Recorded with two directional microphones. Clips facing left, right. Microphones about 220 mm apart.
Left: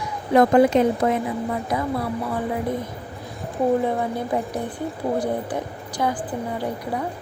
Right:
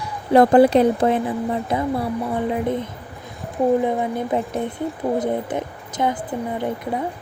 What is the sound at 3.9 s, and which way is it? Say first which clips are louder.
A woman's voice: right 2 dB; 20° right (ahead or behind).